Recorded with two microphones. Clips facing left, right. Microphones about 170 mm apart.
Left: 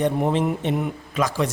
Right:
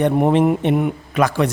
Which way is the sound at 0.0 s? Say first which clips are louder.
Right 6 dB; 60° right (ahead or behind).